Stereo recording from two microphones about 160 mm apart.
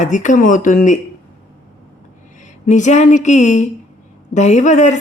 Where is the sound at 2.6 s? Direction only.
50° left (ahead or behind).